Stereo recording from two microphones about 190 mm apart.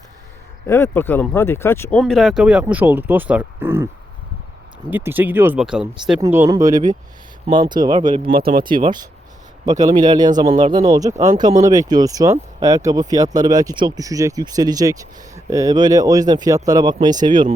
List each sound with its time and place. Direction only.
0.7 s speech: 10° left (ahead or behind)
2.0 s speech: centre (ahead or behind)
4.9 s speech: 10° right (ahead or behind)
6.1 s speech: 15° right (ahead or behind)
8.3 s speech: 50° right (ahead or behind)
8.8 s speech: 25° right (ahead or behind)